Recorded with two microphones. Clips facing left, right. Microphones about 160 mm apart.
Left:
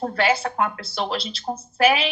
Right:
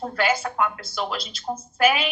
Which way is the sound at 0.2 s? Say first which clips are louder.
Left 1 dB; 30° left (ahead or behind).